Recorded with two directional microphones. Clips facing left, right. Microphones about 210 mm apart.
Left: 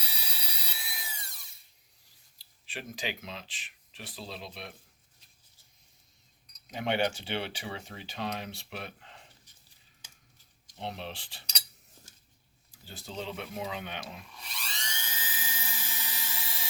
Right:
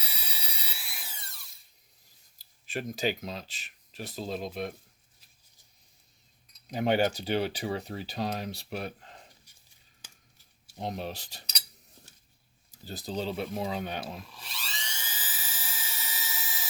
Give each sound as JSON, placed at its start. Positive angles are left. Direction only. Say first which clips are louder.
{"t": 0.0, "sound": "alarm", "louder": "even", "side_deg": -5}
{"t": 2.4, "sound": "speech", "louder": "right 7 dB", "side_deg": -45}
{"t": 6.7, "sound": "speech", "louder": "right 4 dB", "side_deg": -40}
{"t": 10.8, "sound": "speech", "louder": "right 4 dB", "side_deg": -40}
{"t": 12.7, "sound": "speech", "louder": "right 6 dB", "side_deg": -40}
{"t": 14.3, "sound": "drill", "louder": "right 1 dB", "side_deg": 0}